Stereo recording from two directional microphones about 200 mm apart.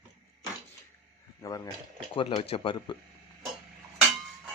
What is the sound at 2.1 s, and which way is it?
Speech, 30° left (ahead or behind).